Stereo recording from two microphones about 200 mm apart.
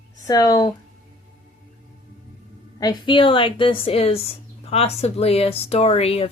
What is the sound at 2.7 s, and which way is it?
A woman's voice, 20° left (ahead or behind).